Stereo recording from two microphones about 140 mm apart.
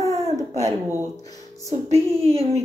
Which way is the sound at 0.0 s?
50° right (ahead or behind).